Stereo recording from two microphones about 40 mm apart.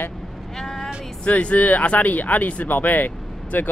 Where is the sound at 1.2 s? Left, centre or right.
Left.